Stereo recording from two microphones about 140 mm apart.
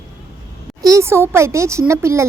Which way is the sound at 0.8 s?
25° right (ahead or behind).